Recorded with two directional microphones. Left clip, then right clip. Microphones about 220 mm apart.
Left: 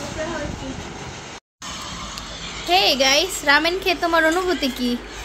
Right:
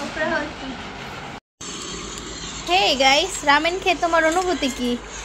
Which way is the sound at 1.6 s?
45° left (ahead or behind).